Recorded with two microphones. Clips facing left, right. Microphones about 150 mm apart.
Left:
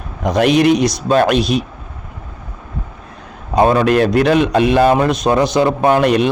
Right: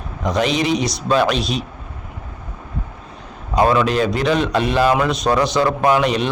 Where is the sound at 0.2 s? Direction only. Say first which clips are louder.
Left 6 dB; 55° left (ahead or behind).